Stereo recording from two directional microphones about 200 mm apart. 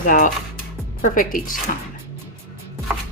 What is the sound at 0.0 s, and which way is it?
Speech, 40° left (ahead or behind).